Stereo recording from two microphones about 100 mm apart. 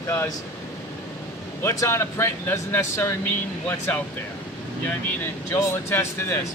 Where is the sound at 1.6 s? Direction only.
30° left (ahead or behind).